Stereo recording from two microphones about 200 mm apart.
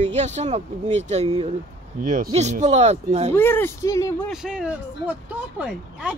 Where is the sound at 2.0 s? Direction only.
45° right (ahead or behind).